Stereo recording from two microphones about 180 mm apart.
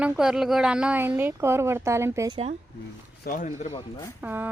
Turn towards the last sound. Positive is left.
turn(degrees=-10)  # may be behind; listen again after turning